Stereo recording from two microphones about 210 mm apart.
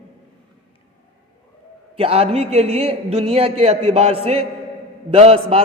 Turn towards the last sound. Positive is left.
turn(degrees=-25)  # may be behind; listen again after turning